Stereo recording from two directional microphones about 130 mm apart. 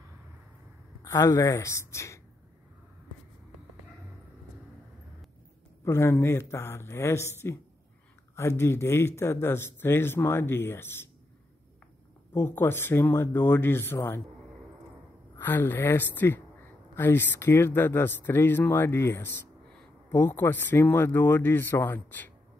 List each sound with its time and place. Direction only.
1.0 s speech: 25° left (ahead or behind)
5.9 s speech: 20° left (ahead or behind)
12.4 s speech: 20° left (ahead or behind)
15.3 s speech: 15° left (ahead or behind)